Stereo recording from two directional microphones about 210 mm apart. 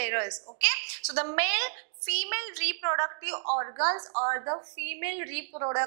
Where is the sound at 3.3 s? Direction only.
35° right (ahead or behind).